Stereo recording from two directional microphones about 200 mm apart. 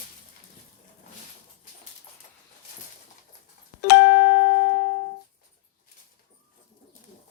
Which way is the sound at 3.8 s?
55° left (ahead or behind).